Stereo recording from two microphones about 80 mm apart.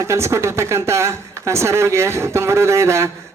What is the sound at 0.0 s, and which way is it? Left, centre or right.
Speech, right.